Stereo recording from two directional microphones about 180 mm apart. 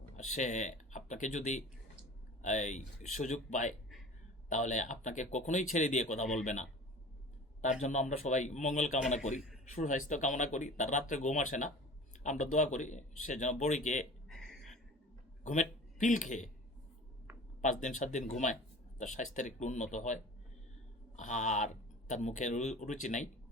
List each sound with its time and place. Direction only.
0.3 s speech: 40° left (ahead or behind)
14.3 s a sound: centre (ahead or behind)
15.4 s speech: 45° left (ahead or behind)
17.6 s speech: 40° left (ahead or behind)
21.2 s speech: 45° left (ahead or behind)